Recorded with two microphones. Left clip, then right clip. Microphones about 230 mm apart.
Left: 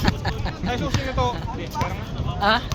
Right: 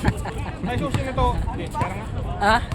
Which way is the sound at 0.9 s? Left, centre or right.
Centre.